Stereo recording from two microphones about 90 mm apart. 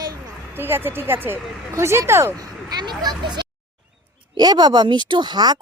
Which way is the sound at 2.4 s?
45° right (ahead or behind).